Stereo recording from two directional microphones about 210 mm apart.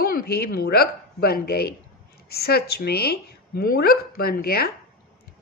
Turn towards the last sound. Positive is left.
turn(degrees=45)  # may be behind; listen again after turning